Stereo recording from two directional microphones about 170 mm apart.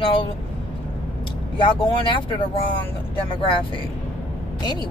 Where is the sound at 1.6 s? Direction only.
30° left (ahead or behind).